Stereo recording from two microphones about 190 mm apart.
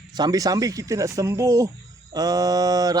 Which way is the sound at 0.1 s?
20° right (ahead or behind).